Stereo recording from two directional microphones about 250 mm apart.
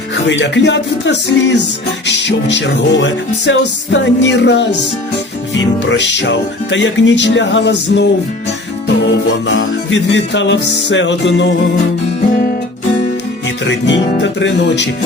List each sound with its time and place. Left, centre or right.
0.3 s music: left
9.5 s music: left
13.7 s music: left